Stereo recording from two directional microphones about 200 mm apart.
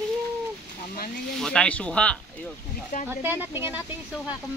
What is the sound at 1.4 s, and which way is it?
Speech, 5° left (ahead or behind).